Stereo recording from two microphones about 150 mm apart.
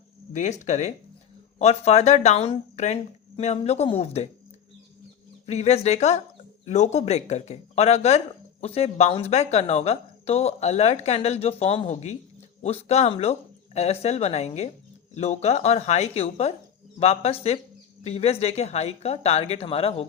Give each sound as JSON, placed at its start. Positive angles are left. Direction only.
{"t": 0.6, "sound": "speech", "side_deg": 50}
{"t": 5.5, "sound": "speech", "side_deg": 45}